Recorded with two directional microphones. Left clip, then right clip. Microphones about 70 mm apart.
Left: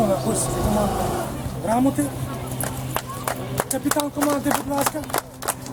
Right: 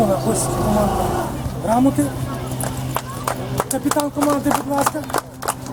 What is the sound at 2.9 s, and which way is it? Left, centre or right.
Run, left.